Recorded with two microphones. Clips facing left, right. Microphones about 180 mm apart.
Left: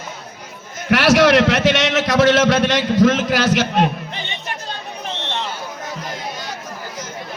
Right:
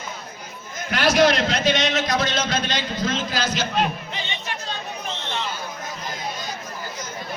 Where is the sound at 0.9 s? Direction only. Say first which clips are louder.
Left 5 dB; 80° left.